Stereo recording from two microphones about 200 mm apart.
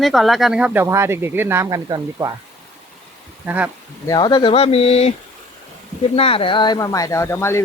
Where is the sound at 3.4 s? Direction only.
10° right (ahead or behind).